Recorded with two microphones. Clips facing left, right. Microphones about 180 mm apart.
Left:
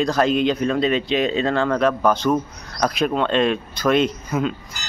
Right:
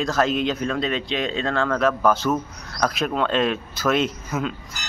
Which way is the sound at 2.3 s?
10° left (ahead or behind).